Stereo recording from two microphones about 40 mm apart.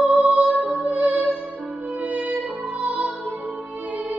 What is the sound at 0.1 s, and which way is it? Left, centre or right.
Music, right.